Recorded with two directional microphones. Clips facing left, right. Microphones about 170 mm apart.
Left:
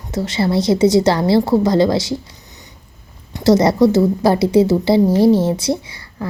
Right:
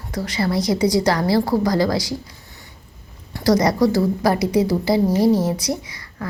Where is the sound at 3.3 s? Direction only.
25° left (ahead or behind).